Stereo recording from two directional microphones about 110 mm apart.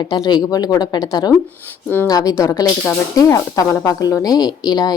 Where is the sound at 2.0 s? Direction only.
35° left (ahead or behind).